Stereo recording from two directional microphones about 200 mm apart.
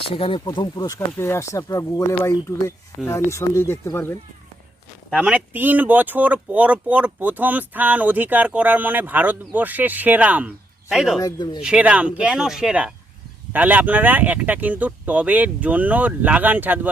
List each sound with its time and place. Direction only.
0.0 s speech: 25° left (ahead or behind)
5.1 s speech: 5° right (ahead or behind)
11.2 s speech: 20° left (ahead or behind)
11.6 s speech: 5° right (ahead or behind)